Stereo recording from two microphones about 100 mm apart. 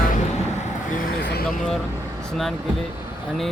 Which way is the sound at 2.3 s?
Centre (ahead or behind).